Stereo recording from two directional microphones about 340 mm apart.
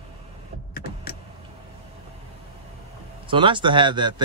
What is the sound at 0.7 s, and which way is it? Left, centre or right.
Power windows, left.